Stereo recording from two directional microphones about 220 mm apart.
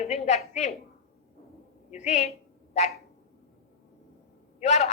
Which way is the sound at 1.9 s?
30° left (ahead or behind).